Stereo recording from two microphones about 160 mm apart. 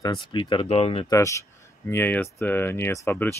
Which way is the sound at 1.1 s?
20° left (ahead or behind).